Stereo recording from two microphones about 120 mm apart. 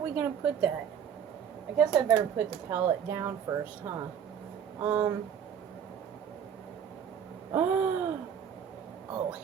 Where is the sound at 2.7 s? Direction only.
20° right (ahead or behind).